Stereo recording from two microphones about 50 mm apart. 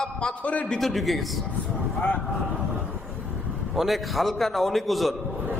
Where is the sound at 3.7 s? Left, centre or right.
Centre.